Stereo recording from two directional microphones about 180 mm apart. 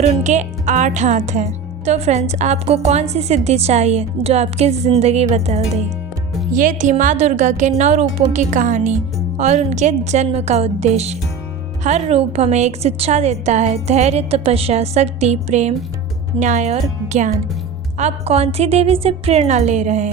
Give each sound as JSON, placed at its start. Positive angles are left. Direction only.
{"t": 0.0, "sound": "a woman's voice", "side_deg": -40}